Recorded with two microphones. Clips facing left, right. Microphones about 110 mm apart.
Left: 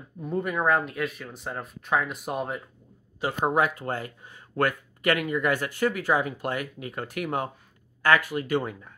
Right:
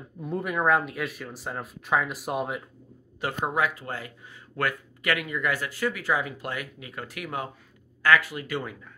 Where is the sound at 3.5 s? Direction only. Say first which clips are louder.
Left 3 dB; 50° left (ahead or behind).